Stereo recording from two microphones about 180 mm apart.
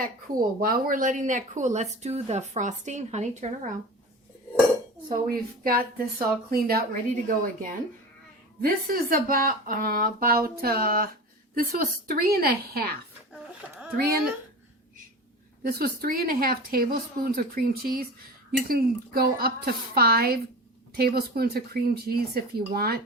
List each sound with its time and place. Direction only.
0.3 s speech: 50° right (ahead or behind)
5.0 s a woman's voice: 50° right (ahead or behind)
13.3 s a sound: 5° right (ahead or behind)
15.6 s speech: 55° right (ahead or behind)